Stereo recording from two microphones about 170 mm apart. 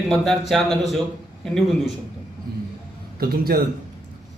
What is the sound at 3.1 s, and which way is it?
Speech, 60° right (ahead or behind).